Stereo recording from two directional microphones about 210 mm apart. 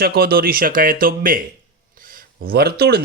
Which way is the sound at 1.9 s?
40° right (ahead or behind).